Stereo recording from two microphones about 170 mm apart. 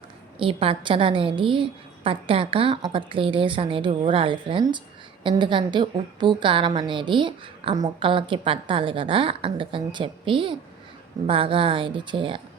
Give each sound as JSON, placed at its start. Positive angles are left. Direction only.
{"t": 0.3, "sound": "a woman's voice", "side_deg": -30}